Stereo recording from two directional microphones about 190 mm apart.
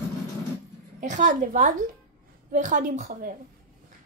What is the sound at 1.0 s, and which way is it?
A woman's voice, 40° right (ahead or behind).